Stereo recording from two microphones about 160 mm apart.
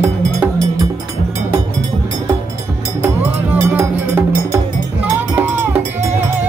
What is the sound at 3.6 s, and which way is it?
Music, 15° right (ahead or behind).